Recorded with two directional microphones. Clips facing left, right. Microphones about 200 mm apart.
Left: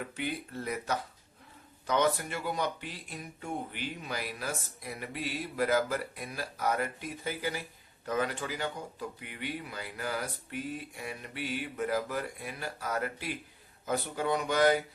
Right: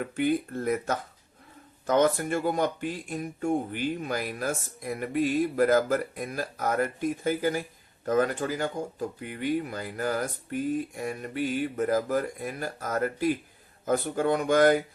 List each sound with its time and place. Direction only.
0.0 s speech: 50° right (ahead or behind)